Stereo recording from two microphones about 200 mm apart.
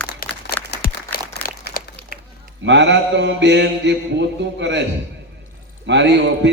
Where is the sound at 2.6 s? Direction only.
60° right (ahead or behind).